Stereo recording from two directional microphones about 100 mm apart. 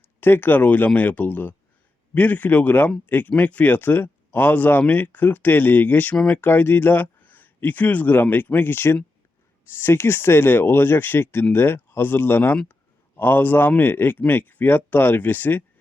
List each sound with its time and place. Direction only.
0.0 s speech: 20° left (ahead or behind)